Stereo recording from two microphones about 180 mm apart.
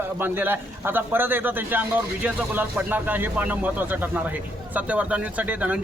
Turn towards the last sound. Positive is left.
turn(degrees=-10)  # may be behind; listen again after turning